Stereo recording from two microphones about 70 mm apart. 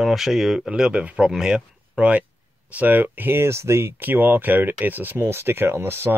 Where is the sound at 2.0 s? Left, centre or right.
Centre.